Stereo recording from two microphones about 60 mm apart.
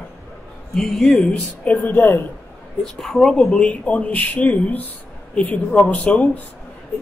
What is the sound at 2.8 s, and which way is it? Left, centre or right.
Speech, centre.